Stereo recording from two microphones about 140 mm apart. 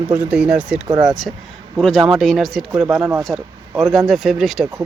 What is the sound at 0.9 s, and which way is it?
Speech, 30° right (ahead or behind).